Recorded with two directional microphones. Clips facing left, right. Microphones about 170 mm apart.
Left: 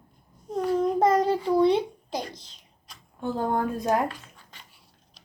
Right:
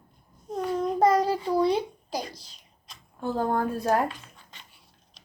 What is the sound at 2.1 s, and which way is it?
Speech, 10° right (ahead or behind).